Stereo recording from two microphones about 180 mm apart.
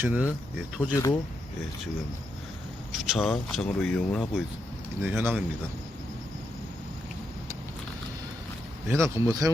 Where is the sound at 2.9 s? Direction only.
Centre (ahead or behind).